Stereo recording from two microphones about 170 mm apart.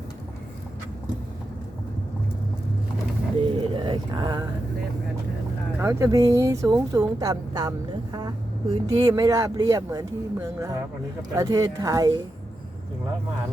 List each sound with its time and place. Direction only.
3.3 s a sound: 30° right (ahead or behind)
5.8 s speech: 15° right (ahead or behind)
9.0 s speech: 25° right (ahead or behind)